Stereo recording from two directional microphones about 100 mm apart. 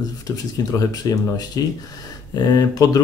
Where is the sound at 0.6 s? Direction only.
40° left (ahead or behind).